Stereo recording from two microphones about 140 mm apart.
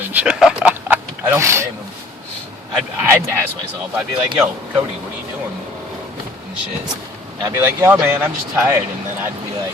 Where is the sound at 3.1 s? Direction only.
15° right (ahead or behind).